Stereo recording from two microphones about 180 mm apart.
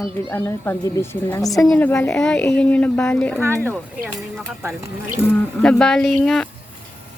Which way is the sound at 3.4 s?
15° right (ahead or behind).